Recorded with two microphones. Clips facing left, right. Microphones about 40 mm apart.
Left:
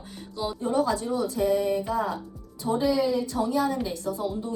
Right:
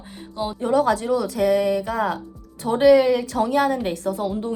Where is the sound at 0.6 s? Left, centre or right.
Right.